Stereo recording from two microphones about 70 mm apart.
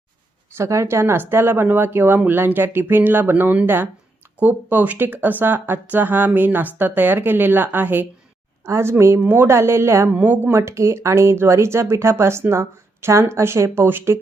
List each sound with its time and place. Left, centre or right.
0.5 s speech: right
8.6 s speech: right
10.1 s speech: right
10.5 s speech: right